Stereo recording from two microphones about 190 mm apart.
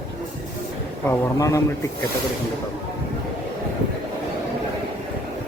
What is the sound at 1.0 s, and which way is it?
Speech, 15° left (ahead or behind).